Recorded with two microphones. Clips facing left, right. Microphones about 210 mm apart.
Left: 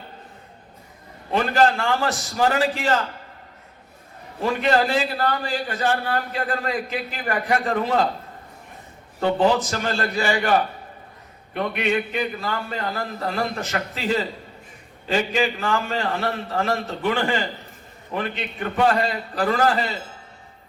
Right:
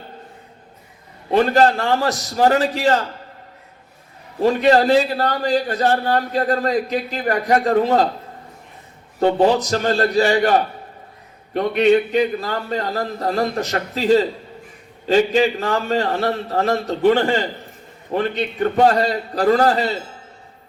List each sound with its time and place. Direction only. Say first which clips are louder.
1.3 s a man's voice: right 5 dB; 35° right (ahead or behind)
4.4 s a man's voice: right 6 dB; 35° right (ahead or behind)
9.2 s a man's voice: right 4 dB; 40° right (ahead or behind)
11.5 s a man's voice: right 8 dB; 35° right (ahead or behind)